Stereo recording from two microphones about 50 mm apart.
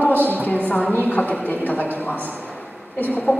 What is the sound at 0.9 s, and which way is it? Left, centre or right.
A woman's voice, left.